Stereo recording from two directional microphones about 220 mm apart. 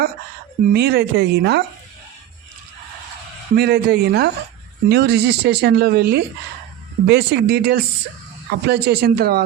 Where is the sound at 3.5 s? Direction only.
45° right (ahead or behind).